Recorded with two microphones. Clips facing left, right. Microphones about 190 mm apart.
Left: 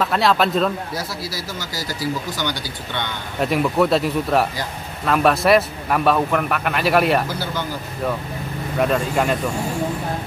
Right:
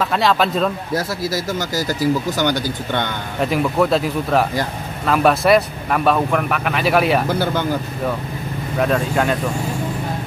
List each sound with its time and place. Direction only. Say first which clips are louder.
0.0 s speech: right 1 dB; centre (ahead or behind)
0.9 s speech: right 7 dB; 50° right (ahead or behind)
3.3 s speech: right 1 dB; centre (ahead or behind)
7.2 s speech: right 7 dB; 55° right (ahead or behind)
8.7 s speech: right 1 dB; centre (ahead or behind)